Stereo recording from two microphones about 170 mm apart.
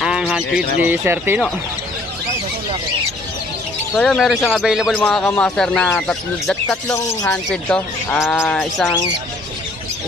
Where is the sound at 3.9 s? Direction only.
Centre (ahead or behind).